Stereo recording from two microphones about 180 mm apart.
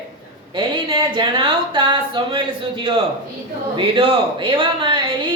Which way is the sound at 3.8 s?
25° right (ahead or behind).